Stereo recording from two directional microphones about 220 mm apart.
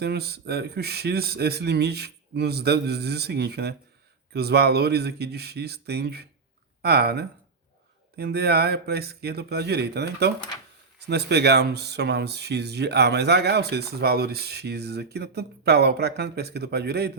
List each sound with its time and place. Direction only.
0.0 s speech: 45° right (ahead or behind)